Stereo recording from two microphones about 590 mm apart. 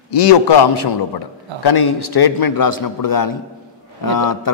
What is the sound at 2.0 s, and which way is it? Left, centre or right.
A man's voice, left.